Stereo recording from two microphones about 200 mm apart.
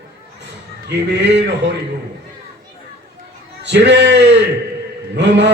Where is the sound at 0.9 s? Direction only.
60° right (ahead or behind).